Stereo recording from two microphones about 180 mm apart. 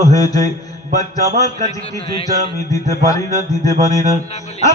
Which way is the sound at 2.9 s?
20° left (ahead or behind).